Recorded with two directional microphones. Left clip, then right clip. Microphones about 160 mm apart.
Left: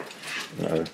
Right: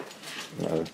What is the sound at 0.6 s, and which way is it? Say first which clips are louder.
Speech: left 2 dB; 5° left (ahead or behind).